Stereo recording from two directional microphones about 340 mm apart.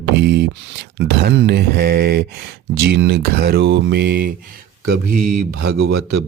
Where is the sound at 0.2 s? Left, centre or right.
Right.